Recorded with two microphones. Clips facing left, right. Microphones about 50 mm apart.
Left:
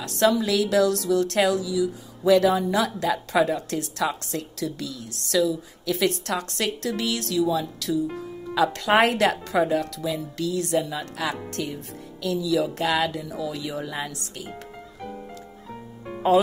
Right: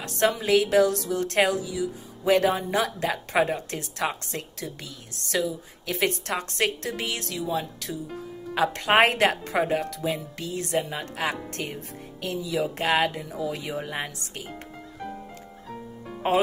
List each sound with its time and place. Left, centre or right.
0.0 s a woman's voice: right
14.5 s music: centre
16.2 s a woman's voice: right